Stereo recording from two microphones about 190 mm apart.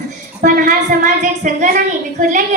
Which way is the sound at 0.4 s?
45° right (ahead or behind).